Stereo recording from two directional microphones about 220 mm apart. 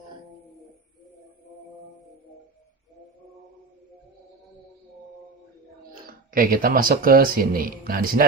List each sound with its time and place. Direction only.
5.9 s speech: 40° right (ahead or behind)